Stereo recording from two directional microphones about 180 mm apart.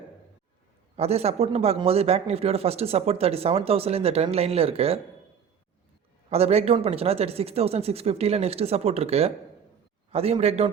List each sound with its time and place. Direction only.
0.9 s a man's voice: 35° right (ahead or behind)
6.3 s a man's voice: 35° right (ahead or behind)